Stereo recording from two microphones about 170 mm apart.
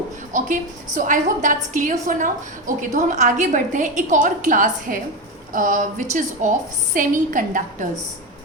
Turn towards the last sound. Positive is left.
turn(degrees=-50)  # may be behind; listen again after turning